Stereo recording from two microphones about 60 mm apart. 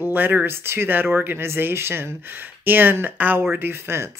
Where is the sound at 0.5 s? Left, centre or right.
Right.